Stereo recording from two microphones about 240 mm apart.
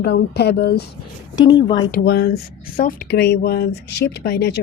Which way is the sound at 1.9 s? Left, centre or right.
Left.